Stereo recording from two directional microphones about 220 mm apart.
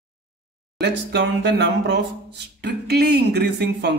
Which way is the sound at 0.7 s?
50° right (ahead or behind).